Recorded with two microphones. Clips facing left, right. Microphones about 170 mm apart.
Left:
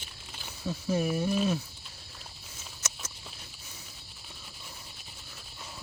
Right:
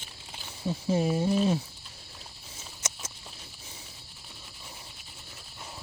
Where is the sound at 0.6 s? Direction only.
25° right (ahead or behind).